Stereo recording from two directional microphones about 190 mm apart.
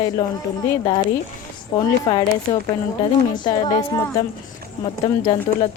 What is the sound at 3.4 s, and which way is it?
Speech, 25° left (ahead or behind).